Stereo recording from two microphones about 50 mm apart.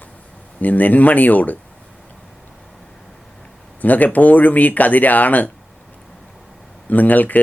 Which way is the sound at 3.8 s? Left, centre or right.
Left.